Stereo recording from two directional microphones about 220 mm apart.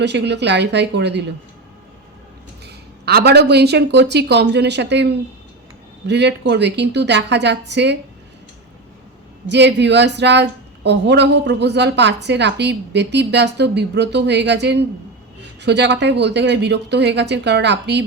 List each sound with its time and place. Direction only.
0.0 s a woman's voice: 50° right (ahead or behind)
2.6 s a woman's voice: 50° right (ahead or behind)
6.1 s a woman's voice: 50° right (ahead or behind)
9.5 s a woman's voice: 50° right (ahead or behind)